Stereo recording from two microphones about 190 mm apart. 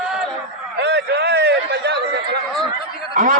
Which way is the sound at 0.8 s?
60° right (ahead or behind).